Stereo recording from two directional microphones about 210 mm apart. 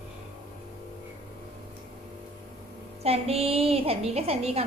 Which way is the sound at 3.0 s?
30° right (ahead or behind).